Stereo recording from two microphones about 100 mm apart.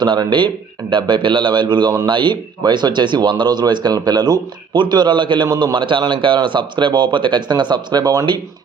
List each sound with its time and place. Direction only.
0.0 s speech: 50° right (ahead or behind)